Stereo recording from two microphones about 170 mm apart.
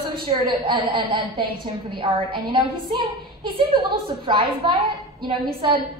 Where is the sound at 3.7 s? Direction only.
25° right (ahead or behind).